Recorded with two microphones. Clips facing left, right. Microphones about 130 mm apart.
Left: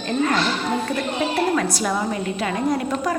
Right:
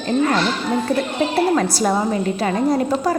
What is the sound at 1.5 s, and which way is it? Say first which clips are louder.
A woman's voice: right 4 dB; 35° right (ahead or behind).